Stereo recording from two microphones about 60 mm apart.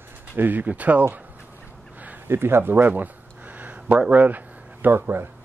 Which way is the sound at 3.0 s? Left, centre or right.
Right.